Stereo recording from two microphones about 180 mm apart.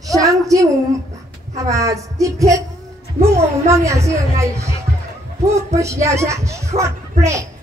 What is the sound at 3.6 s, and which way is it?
A woman's voice, 15° right (ahead or behind).